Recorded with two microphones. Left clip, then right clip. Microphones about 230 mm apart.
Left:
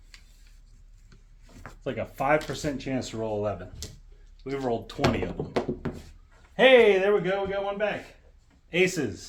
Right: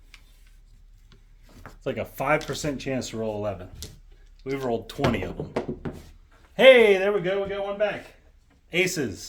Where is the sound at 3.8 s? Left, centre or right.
Right.